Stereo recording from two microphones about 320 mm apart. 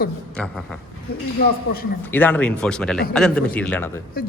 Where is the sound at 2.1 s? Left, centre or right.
Centre.